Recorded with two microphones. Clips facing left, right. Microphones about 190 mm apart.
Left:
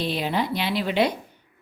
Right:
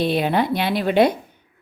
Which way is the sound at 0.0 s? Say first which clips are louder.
Right 6 dB; 60° right (ahead or behind).